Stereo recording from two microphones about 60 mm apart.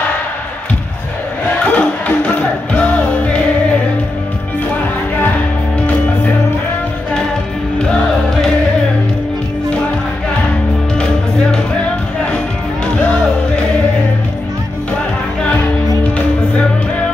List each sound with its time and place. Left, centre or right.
1.7 s music: left